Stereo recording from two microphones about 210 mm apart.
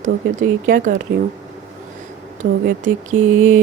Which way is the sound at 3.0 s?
40° right (ahead or behind).